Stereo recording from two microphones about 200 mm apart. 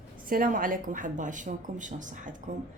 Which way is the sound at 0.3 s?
45° right (ahead or behind).